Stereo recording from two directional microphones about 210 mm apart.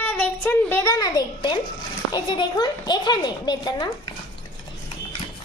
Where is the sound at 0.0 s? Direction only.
5° left (ahead or behind).